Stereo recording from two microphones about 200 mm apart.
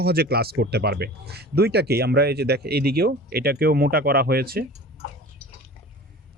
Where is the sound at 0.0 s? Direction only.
50° right (ahead or behind).